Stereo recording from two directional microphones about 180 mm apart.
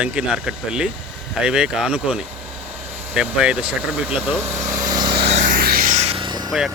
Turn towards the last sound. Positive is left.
turn(degrees=0)  # may be behind; listen again after turning